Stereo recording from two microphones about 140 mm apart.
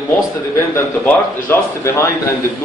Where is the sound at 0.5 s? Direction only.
15° left (ahead or behind).